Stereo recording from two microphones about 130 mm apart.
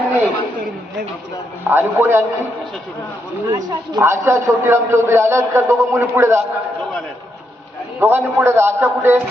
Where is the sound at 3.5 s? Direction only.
25° right (ahead or behind).